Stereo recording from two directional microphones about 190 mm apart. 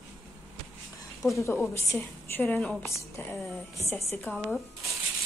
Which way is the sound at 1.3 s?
15° left (ahead or behind).